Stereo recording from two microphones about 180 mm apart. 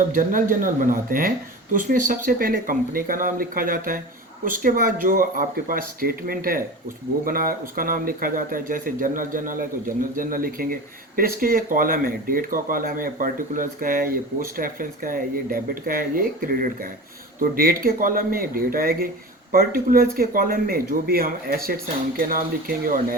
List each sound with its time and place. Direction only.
0.1 s a man's voice: 50° right (ahead or behind)